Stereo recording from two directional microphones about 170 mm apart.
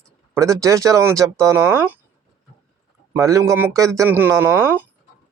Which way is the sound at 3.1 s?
20° right (ahead or behind).